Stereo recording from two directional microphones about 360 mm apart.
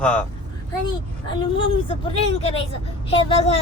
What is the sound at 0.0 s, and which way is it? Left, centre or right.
Speech, centre.